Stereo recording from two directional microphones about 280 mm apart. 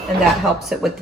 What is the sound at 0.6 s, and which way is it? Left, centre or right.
Speech, centre.